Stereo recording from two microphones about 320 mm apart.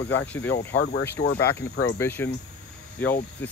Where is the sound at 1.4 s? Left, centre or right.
Centre.